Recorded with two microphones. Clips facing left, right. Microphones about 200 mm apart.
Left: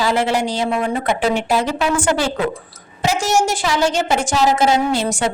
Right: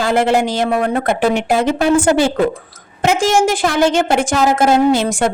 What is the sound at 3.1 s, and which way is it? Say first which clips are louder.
Speech: right 4 dB; 90° right.